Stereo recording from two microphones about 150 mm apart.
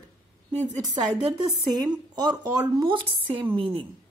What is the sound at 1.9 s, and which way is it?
Speech, 25° right (ahead or behind).